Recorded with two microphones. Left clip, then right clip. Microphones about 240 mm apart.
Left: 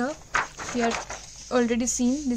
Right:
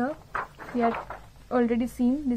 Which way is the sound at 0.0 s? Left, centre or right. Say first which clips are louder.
Left 4 dB; left.